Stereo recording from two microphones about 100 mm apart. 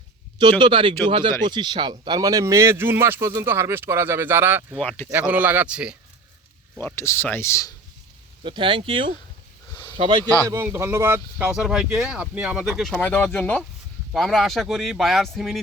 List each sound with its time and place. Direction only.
0.6 s speech: 55° right (ahead or behind); by 4.8 s 20° right (ahead or behind)
4.8 s speech: 15° left (ahead or behind)
5.1 s speech: 15° right (ahead or behind)
6.7 s speech: 25° left (ahead or behind)
8.4 s speech: 55° right (ahead or behind)
10.4 s speech: 25° right (ahead or behind)
11.5 s speech: 5° right (ahead or behind)
13.0 s speech: 15° left (ahead or behind)
14.1 s speech: centre (ahead or behind)